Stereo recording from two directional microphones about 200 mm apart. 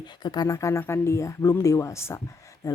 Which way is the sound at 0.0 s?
20° left (ahead or behind).